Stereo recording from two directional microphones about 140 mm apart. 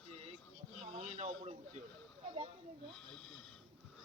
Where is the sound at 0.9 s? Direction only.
60° right (ahead or behind).